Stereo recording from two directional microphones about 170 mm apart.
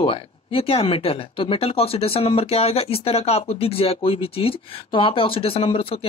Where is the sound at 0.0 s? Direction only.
35° left (ahead or behind).